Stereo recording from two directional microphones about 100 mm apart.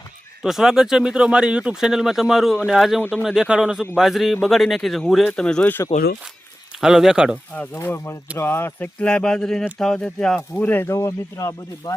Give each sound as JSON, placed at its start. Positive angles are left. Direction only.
{"t": 0.4, "sound": "speech", "side_deg": -5}
{"t": 6.8, "sound": "speech", "side_deg": -5}
{"t": 7.5, "sound": "speech", "side_deg": 15}